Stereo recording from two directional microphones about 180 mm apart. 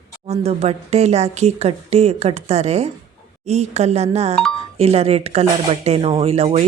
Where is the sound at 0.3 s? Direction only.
35° right (ahead or behind).